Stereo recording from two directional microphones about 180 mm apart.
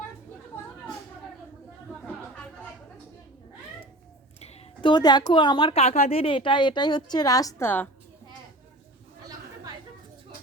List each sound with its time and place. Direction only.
4.4 s a woman's voice: 35° left (ahead or behind); by 7.9 s 10° left (ahead or behind)